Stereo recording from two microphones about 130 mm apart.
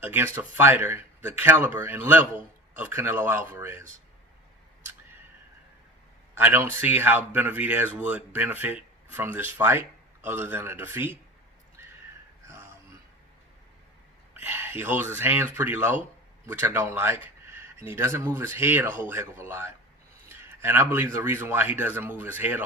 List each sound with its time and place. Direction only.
0.0 s speech: 15° right (ahead or behind)
6.3 s speech: 15° right (ahead or behind)
11.8 s crow: 20° right (ahead or behind)
14.4 s speech: 15° right (ahead or behind)